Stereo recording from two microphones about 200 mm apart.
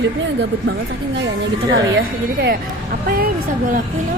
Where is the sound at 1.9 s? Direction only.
55° right (ahead or behind).